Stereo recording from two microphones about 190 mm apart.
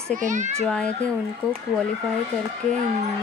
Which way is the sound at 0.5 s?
5° left (ahead or behind).